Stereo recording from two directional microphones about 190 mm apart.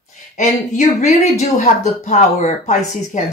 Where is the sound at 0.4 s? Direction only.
40° left (ahead or behind).